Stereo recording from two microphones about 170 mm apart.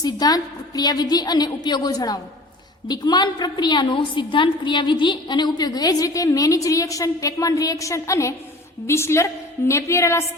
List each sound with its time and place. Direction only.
0.0 s a woman's voice: 20° left (ahead or behind)